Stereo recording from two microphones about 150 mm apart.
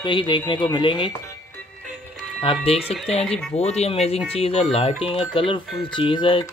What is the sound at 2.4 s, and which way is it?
Speech, 40° left (ahead or behind).